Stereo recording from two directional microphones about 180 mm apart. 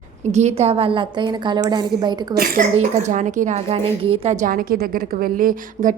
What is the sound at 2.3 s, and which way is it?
A woman's voice, 50° right (ahead or behind).